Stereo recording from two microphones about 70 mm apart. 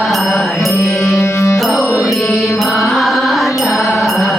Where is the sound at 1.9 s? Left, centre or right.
Left.